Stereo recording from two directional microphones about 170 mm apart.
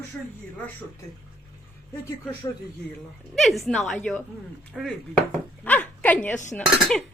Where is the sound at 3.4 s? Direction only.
Centre (ahead or behind).